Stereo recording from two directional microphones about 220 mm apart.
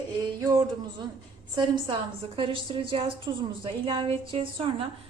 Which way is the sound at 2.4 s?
25° right (ahead or behind).